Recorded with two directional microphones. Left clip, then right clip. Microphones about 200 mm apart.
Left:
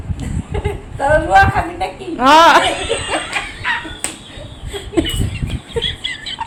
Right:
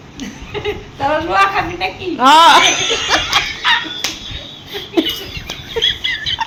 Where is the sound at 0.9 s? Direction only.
20° left (ahead or behind).